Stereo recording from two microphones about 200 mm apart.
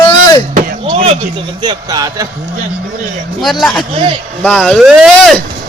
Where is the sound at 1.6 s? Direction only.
20° right (ahead or behind).